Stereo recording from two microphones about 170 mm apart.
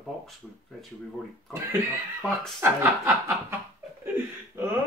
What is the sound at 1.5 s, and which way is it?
Speech, 10° right (ahead or behind).